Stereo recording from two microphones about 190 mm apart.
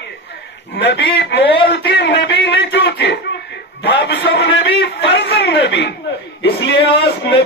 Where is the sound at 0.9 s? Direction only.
65° left (ahead or behind).